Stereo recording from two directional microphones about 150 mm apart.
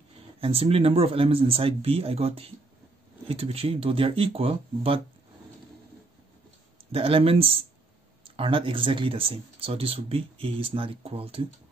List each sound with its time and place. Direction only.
0.4 s speech: 40° right (ahead or behind)
6.9 s speech: 40° right (ahead or behind)